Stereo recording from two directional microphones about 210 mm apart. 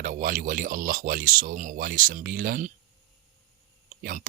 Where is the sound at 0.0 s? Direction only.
40° right (ahead or behind).